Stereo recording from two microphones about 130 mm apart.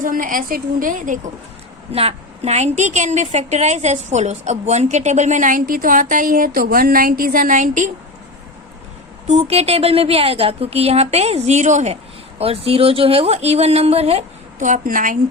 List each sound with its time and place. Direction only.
0.0 s a woman's voice: 90° right
1.9 s a woman's voice: 50° right (ahead or behind); by 7.9 s 80° right
9.2 s a woman's voice: 55° right (ahead or behind)
12.4 s a woman's voice: 50° right (ahead or behind)
14.6 s a woman's voice: 85° right